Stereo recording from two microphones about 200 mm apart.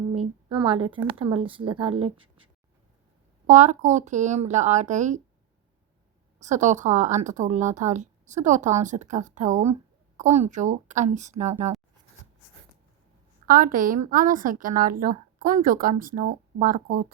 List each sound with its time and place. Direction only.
0.9 s speech: 25° right (ahead or behind)
3.4 s speech: 35° right (ahead or behind)
6.4 s speech: 35° right (ahead or behind)
13.5 s a woman's voice: 40° right (ahead or behind)